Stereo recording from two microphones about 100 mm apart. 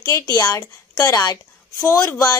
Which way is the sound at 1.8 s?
30° left (ahead or behind).